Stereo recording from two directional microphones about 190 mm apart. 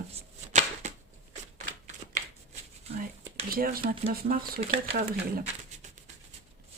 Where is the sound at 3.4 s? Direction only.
50° right (ahead or behind).